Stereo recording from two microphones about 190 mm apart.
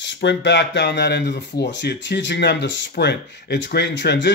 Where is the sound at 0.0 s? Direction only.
70° left (ahead or behind).